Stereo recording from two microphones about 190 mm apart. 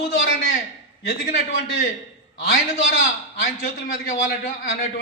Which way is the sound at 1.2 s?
50° left (ahead or behind).